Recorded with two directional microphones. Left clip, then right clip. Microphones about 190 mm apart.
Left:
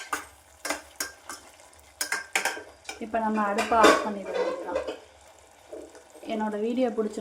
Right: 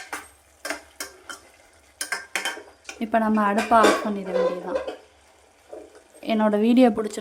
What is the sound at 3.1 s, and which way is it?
Speech, 65° right (ahead or behind).